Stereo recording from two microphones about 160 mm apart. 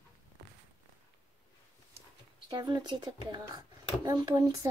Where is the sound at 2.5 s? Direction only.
25° right (ahead or behind).